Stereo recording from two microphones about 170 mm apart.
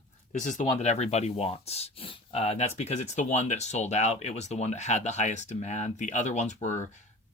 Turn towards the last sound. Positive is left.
turn(degrees=45)  # may be behind; listen again after turning